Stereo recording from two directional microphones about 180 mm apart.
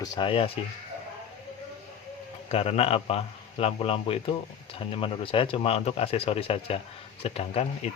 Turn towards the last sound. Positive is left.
turn(degrees=35)  # may be behind; listen again after turning